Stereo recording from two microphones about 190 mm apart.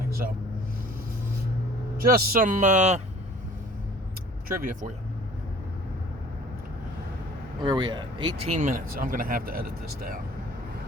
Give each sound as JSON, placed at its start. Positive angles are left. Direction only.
{"t": 0.1, "sound": "vehicle", "side_deg": -50}
{"t": 2.0, "sound": "speech", "side_deg": -50}
{"t": 4.4, "sound": "speech", "side_deg": -45}
{"t": 7.6, "sound": "speech", "side_deg": -25}
{"t": 8.5, "sound": "speech", "side_deg": -40}